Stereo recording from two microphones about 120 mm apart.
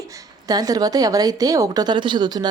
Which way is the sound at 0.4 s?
30° right (ahead or behind).